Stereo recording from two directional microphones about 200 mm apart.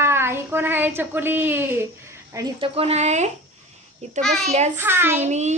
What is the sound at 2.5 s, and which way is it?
Speech, 30° right (ahead or behind).